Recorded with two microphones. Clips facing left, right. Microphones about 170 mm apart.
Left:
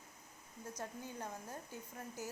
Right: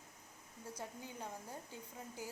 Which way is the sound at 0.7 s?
10° right (ahead or behind).